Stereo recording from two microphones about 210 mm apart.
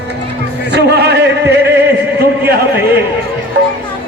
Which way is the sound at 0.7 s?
55° right (ahead or behind).